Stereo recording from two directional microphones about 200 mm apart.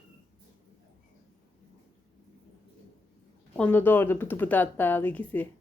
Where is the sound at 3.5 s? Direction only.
5° left (ahead or behind).